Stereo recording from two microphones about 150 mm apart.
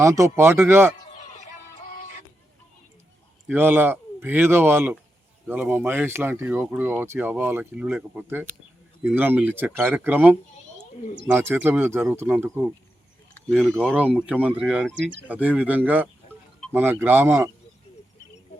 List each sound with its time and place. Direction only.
0.0 s speech: 20° right (ahead or behind)
1.2 s music: 50° left (ahead or behind)
3.4 s speech: 15° right (ahead or behind)
13.5 s speech: 5° left (ahead or behind)
13.9 s speech: 10° right (ahead or behind)